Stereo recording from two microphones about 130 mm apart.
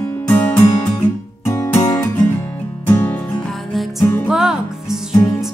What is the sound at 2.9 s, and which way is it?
Music, 15° left (ahead or behind).